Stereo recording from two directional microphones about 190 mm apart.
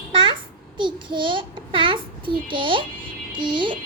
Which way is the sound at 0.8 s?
25° right (ahead or behind).